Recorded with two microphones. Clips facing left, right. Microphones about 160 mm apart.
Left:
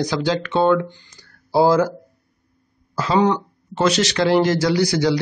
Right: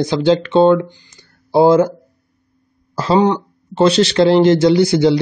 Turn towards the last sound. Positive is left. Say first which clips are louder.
# right 6 dB
turn(degrees=-25)  # may be behind; listen again after turning